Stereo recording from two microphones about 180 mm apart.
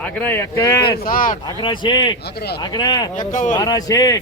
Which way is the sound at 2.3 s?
65° left (ahead or behind).